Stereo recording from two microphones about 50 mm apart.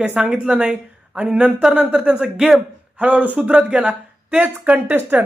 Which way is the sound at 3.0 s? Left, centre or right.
Right.